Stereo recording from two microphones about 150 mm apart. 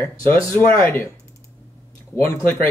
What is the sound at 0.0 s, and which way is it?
Speech, 15° left (ahead or behind).